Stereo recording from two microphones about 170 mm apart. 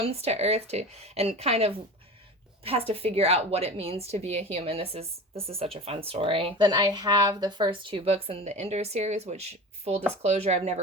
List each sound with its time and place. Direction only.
0.0 s a woman's voice: 35° right (ahead or behind)